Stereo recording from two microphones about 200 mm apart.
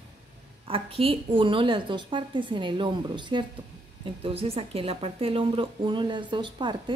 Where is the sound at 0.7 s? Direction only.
25° right (ahead or behind).